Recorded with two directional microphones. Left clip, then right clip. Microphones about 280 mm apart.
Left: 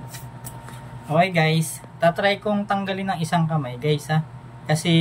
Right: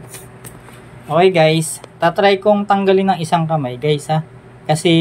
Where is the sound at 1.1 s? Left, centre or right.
Centre.